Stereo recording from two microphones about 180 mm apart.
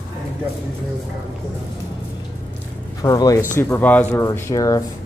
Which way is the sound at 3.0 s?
20° left (ahead or behind).